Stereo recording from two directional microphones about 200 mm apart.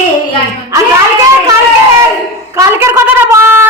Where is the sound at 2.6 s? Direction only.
15° right (ahead or behind).